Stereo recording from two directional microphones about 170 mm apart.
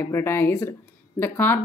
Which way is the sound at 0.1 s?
15° left (ahead or behind).